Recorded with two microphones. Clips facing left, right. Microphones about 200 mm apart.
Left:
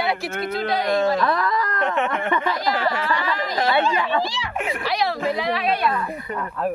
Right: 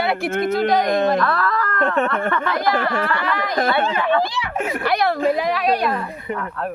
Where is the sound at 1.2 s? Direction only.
15° left (ahead or behind).